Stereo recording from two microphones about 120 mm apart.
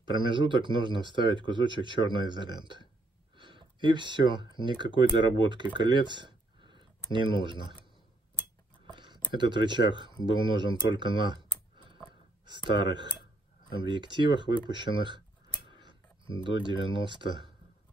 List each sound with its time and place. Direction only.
0.1 s speech: 40° right (ahead or behind)
3.3 s a sound: 45° right (ahead or behind)
4.6 s speech: 40° right (ahead or behind)
8.8 s a sound: 40° right (ahead or behind)
10.3 s speech: 40° right (ahead or behind)
14.6 s tick-tock: 40° right (ahead or behind)
16.4 s speech: 40° right (ahead or behind)